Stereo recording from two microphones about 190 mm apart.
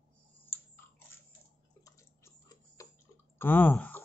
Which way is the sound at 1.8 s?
15° left (ahead or behind).